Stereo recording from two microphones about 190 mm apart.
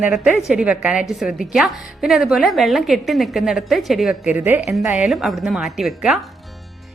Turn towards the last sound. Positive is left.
turn(degrees=0)  # may be behind; listen again after turning